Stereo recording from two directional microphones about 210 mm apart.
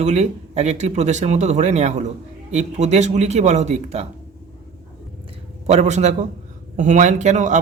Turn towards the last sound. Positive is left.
turn(degrees=-35)  # may be behind; listen again after turning